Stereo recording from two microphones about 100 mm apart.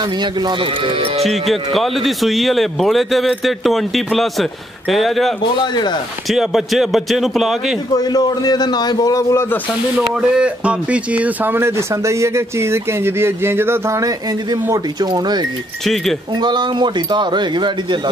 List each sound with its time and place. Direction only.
0.0 s speech: 50° right (ahead or behind); by 1.2 s 65° right (ahead or behind)
1.2 s a man's voice: centre (ahead or behind)
5.4 s a man's voice: 50° left (ahead or behind)
6.2 s a man's voice: 5° right (ahead or behind)
7.9 s a man's voice: 40° left (ahead or behind)
9.9 s speech: 10° right (ahead or behind); by 15.4 s 45° right (ahead or behind)
15.8 s a man's voice: 5° left (ahead or behind)
16.3 s speech: 50° right (ahead or behind)